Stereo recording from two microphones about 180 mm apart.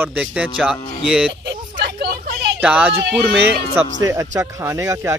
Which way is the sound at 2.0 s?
65° right (ahead or behind).